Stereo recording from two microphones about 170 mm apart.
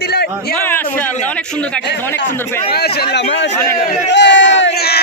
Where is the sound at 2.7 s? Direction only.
70° left (ahead or behind); by 3.4 s 90° left.